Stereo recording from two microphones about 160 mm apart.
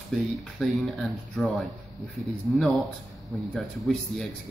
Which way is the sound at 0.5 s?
Centre (ahead or behind).